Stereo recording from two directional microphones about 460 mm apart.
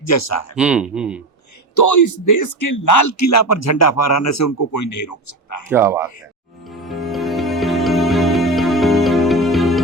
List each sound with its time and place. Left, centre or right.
0.0 s speech: left
0.5 s speech: centre
1.7 s speech: left
5.6 s speech: centre
6.8 s music: centre